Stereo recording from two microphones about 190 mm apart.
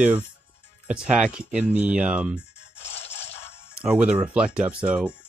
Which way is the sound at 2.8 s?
35° left (ahead or behind).